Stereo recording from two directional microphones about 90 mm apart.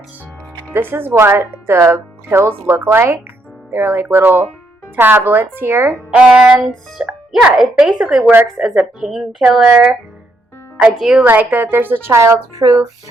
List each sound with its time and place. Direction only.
0.7 s speech: 25° right (ahead or behind)
6.1 s music: 10° right (ahead or behind)
7.5 s a woman's voice: 5° right (ahead or behind)
9.6 s music: 10° right (ahead or behind)
11.2 s speech: 20° right (ahead or behind); by 12.9 s 40° right (ahead or behind)